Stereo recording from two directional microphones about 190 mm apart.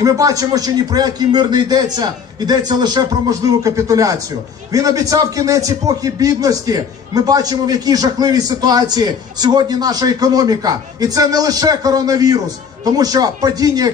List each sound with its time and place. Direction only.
0.0 s a man's voice: 20° right (ahead or behind)